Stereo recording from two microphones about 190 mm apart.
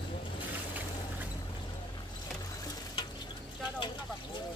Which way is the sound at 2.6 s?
20° left (ahead or behind).